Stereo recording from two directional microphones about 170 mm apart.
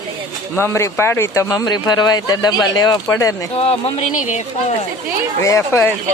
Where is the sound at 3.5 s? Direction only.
35° left (ahead or behind).